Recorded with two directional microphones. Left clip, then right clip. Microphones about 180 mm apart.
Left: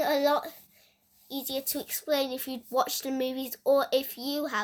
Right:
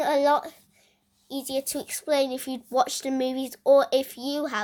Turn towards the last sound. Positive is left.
turn(degrees=-35)  # may be behind; listen again after turning